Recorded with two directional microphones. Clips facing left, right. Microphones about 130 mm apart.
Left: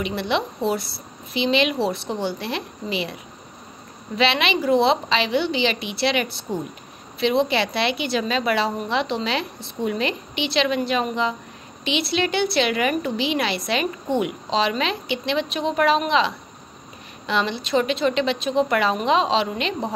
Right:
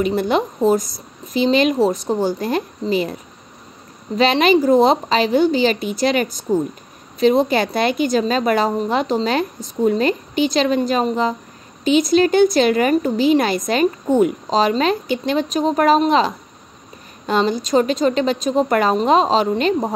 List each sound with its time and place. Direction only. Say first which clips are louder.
0.0 s a woman's voice: right 6 dB; 45° right (ahead or behind)
4.2 s a woman's voice: right 7 dB; 40° right (ahead or behind)